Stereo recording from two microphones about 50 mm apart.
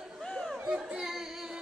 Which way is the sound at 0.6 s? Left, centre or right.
Centre.